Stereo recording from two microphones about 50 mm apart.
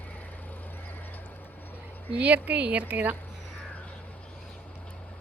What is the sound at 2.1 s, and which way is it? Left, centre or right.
Speech, right.